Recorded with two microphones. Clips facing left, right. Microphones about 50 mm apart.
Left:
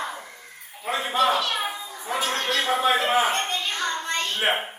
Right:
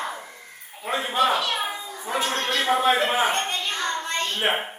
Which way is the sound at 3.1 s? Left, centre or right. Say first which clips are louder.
Left 1 dB; centre.